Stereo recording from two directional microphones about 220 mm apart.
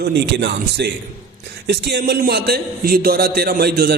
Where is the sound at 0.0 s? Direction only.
50° right (ahead or behind).